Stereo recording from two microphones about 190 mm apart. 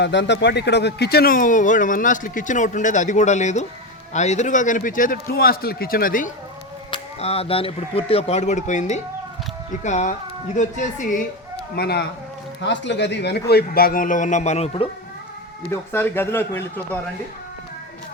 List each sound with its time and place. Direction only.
0.0 s a man's voice: 65° left (ahead or behind); by 6.3 s 45° left (ahead or behind)
6.9 s speech: 30° left (ahead or behind)
11.7 s speech: 55° left (ahead or behind)
12.6 s a man's voice: 70° left (ahead or behind); by 14.8 s 30° left (ahead or behind)
15.7 s a man's voice: 10° left (ahead or behind)